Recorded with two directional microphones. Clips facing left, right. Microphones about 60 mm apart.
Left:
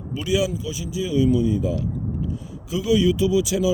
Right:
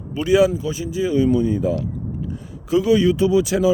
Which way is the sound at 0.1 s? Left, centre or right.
Right.